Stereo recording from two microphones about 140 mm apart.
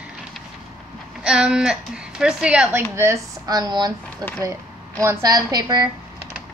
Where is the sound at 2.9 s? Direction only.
20° right (ahead or behind).